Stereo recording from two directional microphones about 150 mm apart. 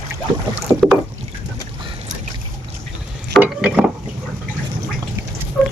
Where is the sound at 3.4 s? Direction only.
5° right (ahead or behind).